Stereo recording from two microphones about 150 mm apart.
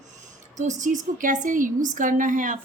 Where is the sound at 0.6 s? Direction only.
55° right (ahead or behind).